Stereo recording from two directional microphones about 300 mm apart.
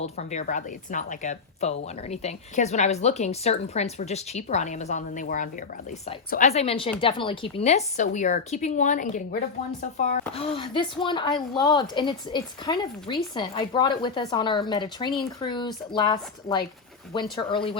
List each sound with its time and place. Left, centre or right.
0.0 s a woman's voice: left